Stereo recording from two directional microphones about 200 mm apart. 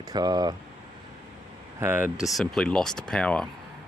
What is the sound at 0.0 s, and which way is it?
Speech, 20° right (ahead or behind).